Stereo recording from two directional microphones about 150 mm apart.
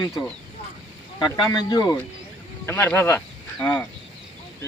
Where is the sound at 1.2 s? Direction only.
25° left (ahead or behind).